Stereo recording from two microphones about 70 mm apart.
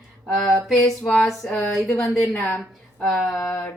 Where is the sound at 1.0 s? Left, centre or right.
Centre.